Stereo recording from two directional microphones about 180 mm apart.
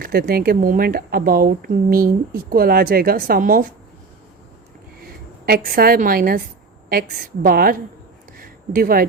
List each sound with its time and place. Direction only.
0.0 s speech: 60° right (ahead or behind)
5.5 s speech: 55° right (ahead or behind)
7.4 s speech: 55° right (ahead or behind)
8.4 s a sound: 55° right (ahead or behind)